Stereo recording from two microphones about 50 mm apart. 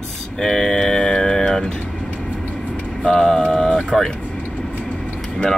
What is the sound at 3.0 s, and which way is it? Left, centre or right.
Speech, centre.